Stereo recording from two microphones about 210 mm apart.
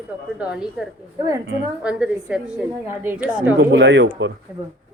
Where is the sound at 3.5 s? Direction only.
55° right (ahead or behind).